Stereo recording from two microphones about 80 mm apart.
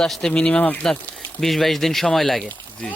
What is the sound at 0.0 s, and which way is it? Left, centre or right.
Speech, centre.